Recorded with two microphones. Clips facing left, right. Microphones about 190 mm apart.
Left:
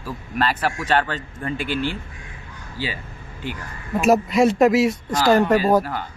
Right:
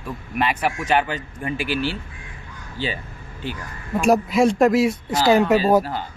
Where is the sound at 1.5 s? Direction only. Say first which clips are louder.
Even; 20° left (ahead or behind).